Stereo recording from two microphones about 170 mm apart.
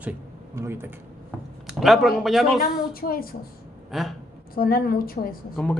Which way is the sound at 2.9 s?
60° left (ahead or behind).